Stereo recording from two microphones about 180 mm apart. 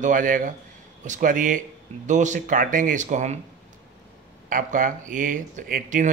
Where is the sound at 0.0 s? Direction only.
45° right (ahead or behind).